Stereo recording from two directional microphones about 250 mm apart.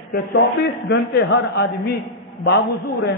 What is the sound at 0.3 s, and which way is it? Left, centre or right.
A man's voice, left.